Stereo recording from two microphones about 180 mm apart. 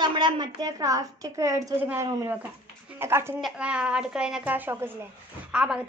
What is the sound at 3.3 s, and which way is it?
A woman's voice, 5° right (ahead or behind).